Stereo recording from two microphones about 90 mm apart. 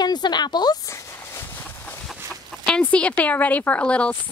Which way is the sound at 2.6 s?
10° left (ahead or behind).